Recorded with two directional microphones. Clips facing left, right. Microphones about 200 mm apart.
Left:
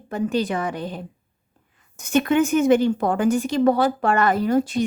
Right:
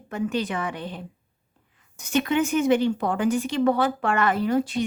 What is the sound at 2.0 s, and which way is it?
A woman's voice, 50° left (ahead or behind).